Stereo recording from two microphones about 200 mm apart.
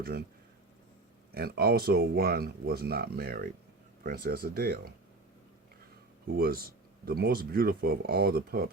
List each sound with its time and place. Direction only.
1.3 s speech: 50° right (ahead or behind)
6.2 s speech: 50° right (ahead or behind)